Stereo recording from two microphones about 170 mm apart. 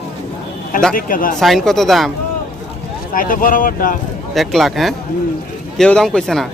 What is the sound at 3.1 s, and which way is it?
Speech, 55° left (ahead or behind).